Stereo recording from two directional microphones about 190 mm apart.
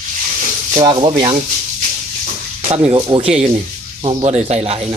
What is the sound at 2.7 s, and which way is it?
Speech, 25° right (ahead or behind).